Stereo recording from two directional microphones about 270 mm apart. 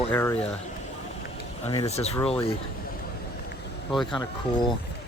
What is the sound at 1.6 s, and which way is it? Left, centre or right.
Speech, left.